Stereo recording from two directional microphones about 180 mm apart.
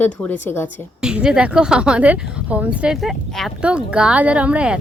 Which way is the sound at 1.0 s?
5° right (ahead or behind).